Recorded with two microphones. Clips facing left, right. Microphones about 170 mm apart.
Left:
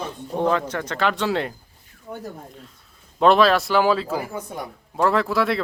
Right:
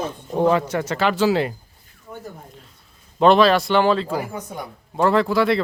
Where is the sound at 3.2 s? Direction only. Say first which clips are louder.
Right 2 dB; centre (ahead or behind).